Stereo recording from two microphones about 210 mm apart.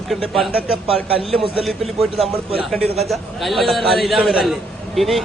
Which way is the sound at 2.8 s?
30° right (ahead or behind).